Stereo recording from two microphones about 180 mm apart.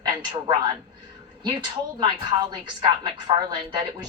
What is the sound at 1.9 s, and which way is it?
A woman's voice, 25° right (ahead or behind).